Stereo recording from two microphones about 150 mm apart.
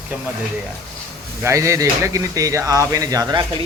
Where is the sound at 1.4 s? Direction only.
20° right (ahead or behind).